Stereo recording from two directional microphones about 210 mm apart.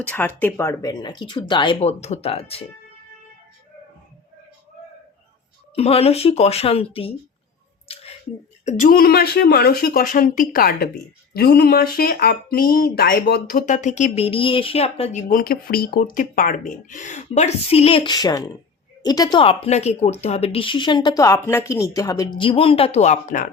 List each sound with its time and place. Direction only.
0.1 s speech: 10° left (ahead or behind); by 2.6 s 25° left (ahead or behind)
5.7 s speech: 30° left (ahead or behind)
8.6 s speech: 40° left (ahead or behind)
15.3 s speech: 45° left (ahead or behind)